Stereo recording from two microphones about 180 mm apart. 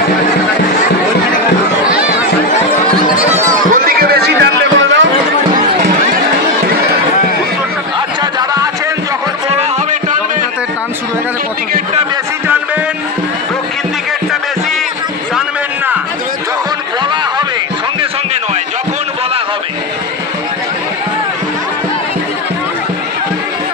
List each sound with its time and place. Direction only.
1.9 s chatter: 5° right (ahead or behind)
3.7 s music: 55° right (ahead or behind); by 5.0 s 80° right
8.2 s music: 20° right (ahead or behind)